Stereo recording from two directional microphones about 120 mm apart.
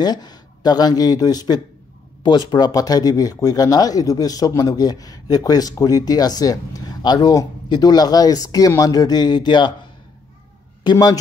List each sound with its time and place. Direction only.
0.0 s speech: 35° left (ahead or behind)
10.8 s a man's voice: 35° left (ahead or behind)